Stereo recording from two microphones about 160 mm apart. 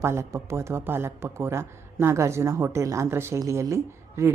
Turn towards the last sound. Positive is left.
turn(degrees=-15)  # may be behind; listen again after turning